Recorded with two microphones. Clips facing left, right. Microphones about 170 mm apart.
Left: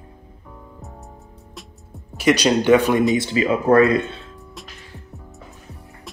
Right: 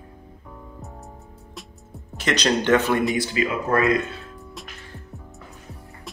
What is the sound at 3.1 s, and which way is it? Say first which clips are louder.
Speech: left 4 dB; 30° left (ahead or behind).